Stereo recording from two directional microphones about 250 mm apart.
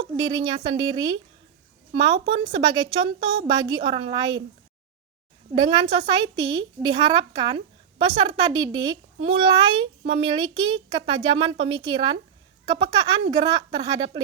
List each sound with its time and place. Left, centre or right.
0.0 s a woman's voice: centre
5.5 s a woman's voice: centre